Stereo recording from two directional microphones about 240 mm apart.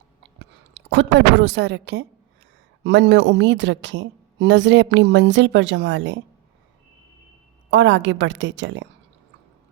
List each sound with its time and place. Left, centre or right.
0.3 s a woman's voice: right
7.7 s a woman's voice: right